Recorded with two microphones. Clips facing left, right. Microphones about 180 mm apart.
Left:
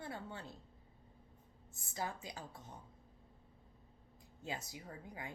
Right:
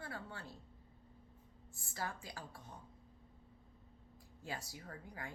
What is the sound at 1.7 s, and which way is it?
Speech, 20° left (ahead or behind).